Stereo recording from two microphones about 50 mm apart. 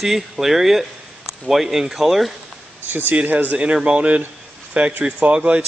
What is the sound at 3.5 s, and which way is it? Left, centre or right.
Speech, right.